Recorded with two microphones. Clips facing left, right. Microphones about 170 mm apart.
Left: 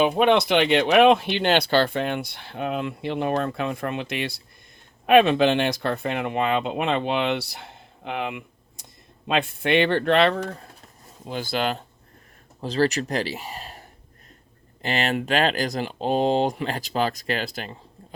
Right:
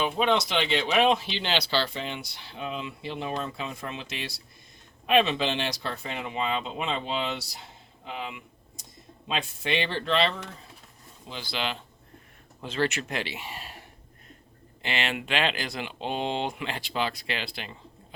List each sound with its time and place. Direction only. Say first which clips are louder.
0.0 s speech: left 6 dB; 60° left (ahead or behind); by 17.7 s 45° left (ahead or behind)